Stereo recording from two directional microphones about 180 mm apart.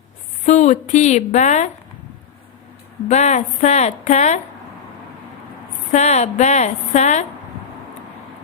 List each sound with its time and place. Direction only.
0.4 s a woman's voice: 40° left (ahead or behind)
3.1 s a woman's voice: 40° left (ahead or behind)
5.9 s a woman's voice: 40° left (ahead or behind)